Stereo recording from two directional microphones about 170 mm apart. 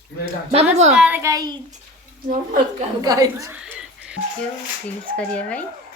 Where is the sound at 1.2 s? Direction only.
20° right (ahead or behind).